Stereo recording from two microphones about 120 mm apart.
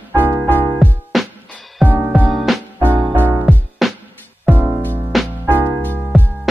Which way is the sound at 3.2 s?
15° right (ahead or behind).